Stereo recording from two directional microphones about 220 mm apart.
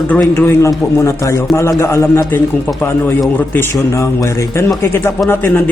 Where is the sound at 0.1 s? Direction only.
10° left (ahead or behind).